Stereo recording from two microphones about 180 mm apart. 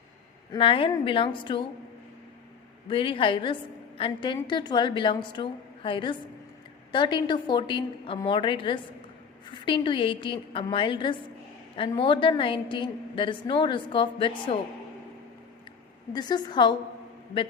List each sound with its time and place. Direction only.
0.5 s a woman's voice: 30° left (ahead or behind)
2.8 s a woman's voice: 30° left (ahead or behind)
16.1 s a woman's voice: 25° left (ahead or behind)